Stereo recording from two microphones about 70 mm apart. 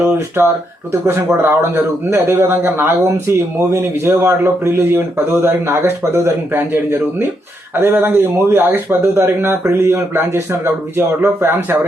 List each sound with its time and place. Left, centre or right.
0.4 s speech: right